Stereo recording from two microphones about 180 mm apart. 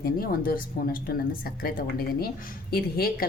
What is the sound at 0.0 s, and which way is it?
A woman's voice, 55° left (ahead or behind).